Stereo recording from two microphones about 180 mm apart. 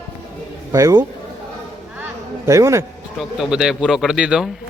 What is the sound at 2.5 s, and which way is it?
Speech, 20° right (ahead or behind).